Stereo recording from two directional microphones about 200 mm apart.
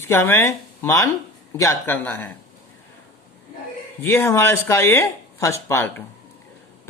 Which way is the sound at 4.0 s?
10° left (ahead or behind).